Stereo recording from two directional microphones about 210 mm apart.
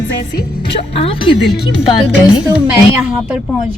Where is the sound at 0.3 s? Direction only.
25° left (ahead or behind).